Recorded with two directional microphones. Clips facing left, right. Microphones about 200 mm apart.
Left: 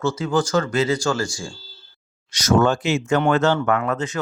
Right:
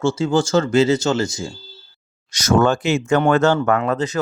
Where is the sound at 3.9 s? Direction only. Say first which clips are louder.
Right 3 dB; 35° right (ahead or behind).